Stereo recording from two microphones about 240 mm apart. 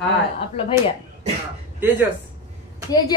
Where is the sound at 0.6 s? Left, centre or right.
Left.